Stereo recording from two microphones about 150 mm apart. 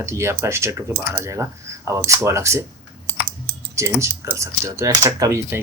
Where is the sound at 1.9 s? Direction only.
20° right (ahead or behind).